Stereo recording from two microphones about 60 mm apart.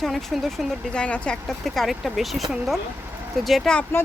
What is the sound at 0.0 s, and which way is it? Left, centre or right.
Speech, centre.